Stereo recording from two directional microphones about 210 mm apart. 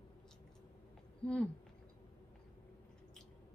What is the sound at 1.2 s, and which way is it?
Speech, 5° left (ahead or behind).